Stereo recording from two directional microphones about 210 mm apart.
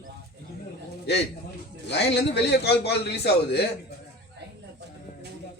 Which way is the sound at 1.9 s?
55° left (ahead or behind).